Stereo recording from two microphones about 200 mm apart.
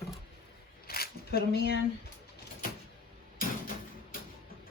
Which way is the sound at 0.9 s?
50° left (ahead or behind).